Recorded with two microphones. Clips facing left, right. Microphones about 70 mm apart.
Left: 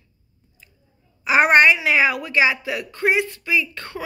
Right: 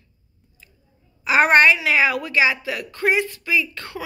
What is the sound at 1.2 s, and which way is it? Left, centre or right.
Speech, left.